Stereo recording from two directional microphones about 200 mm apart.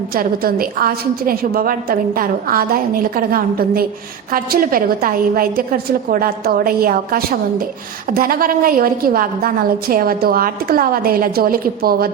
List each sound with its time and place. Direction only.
0.1 s a woman's voice: 45° right (ahead or behind)